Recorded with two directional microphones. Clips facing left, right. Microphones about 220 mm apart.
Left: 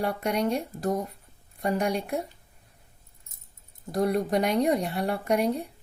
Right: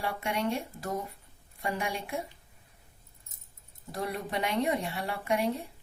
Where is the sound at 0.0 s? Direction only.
40° left (ahead or behind).